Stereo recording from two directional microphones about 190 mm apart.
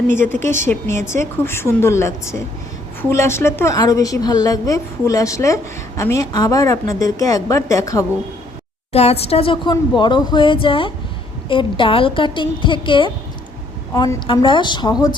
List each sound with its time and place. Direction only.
0.1 s a woman's voice: 10° left (ahead or behind)
8.9 s speech: 35° left (ahead or behind)